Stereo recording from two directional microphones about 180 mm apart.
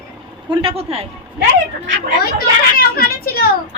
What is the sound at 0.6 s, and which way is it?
Speech, 35° right (ahead or behind).